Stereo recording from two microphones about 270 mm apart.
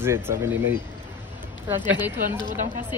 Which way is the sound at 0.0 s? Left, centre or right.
Centre.